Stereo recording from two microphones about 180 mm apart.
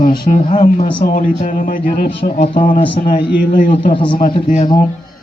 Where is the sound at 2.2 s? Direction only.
40° left (ahead or behind).